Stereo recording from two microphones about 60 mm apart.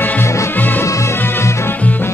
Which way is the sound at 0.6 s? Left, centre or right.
Left.